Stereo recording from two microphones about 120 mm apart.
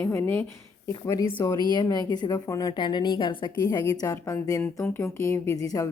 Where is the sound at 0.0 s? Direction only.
15° left (ahead or behind).